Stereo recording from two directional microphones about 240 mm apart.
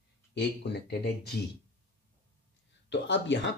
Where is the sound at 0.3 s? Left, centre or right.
Left.